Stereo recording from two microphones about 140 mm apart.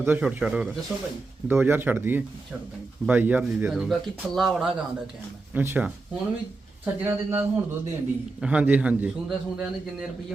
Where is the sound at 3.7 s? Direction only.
Centre (ahead or behind).